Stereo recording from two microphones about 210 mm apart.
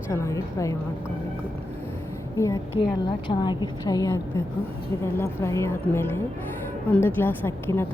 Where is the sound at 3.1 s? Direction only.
20° left (ahead or behind).